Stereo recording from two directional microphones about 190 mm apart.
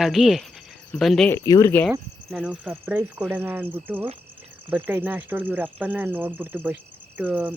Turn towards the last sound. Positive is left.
turn(degrees=-10)  # may be behind; listen again after turning